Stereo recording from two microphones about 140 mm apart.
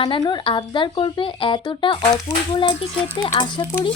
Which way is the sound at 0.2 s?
35° left (ahead or behind).